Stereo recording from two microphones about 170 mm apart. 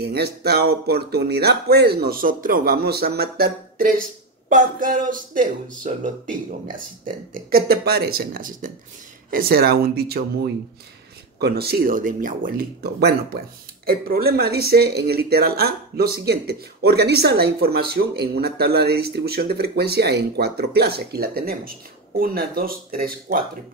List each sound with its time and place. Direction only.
0.0 s speech: 70° right (ahead or behind); by 8.7 s 50° right (ahead or behind)
9.3 s speech: 65° right (ahead or behind)